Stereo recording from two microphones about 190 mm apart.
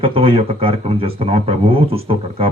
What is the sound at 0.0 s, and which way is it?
Speech, 30° right (ahead or behind).